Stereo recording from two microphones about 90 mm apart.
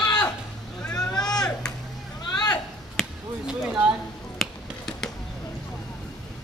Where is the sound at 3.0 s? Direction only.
Centre (ahead or behind).